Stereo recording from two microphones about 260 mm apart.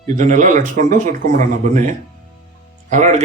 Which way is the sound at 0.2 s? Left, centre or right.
Right.